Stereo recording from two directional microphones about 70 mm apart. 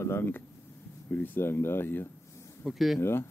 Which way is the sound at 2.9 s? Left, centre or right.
Left.